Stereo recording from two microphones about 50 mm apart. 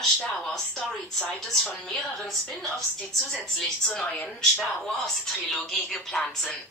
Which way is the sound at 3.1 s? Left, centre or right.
Centre.